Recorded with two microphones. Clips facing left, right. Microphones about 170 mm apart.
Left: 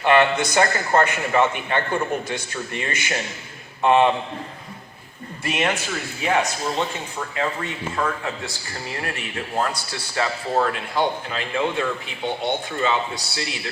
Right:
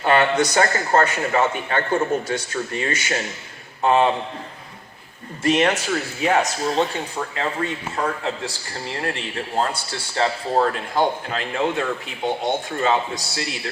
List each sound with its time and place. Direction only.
0.0 s a man's voice: 40° right (ahead or behind)
5.4 s a man's voice: 40° right (ahead or behind)